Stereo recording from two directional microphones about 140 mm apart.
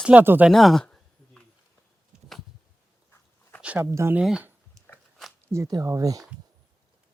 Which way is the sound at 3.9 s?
20° right (ahead or behind).